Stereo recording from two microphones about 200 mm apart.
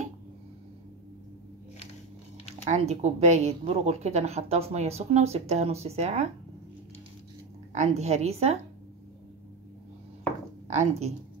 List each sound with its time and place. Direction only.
2.6 s speech: 30° right (ahead or behind)
7.7 s speech: 35° right (ahead or behind)
10.7 s speech: 35° right (ahead or behind)